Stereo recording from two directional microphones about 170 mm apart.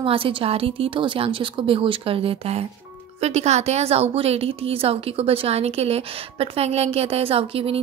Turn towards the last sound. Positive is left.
turn(degrees=-35)  # may be behind; listen again after turning